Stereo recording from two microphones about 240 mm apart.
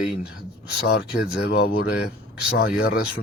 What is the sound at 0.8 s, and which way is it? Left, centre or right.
Speech, left.